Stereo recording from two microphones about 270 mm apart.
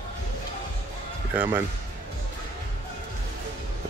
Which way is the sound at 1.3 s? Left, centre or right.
Centre.